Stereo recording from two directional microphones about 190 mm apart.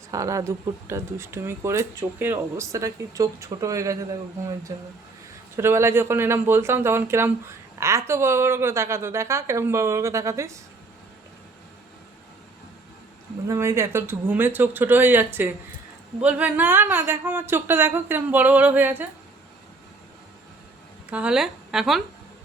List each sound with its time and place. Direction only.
0.1 s speech: 15° right (ahead or behind)
13.5 s speech: 15° right (ahead or behind)
21.1 s a woman's voice: 5° right (ahead or behind)